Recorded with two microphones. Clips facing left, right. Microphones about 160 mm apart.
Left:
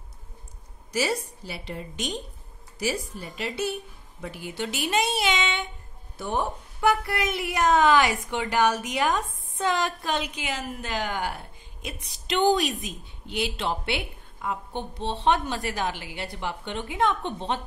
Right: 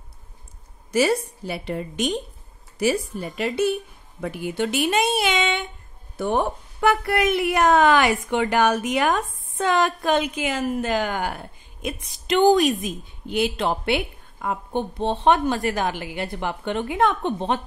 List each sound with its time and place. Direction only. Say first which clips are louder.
0.9 s a woman's voice: right 7 dB; 55° right (ahead or behind)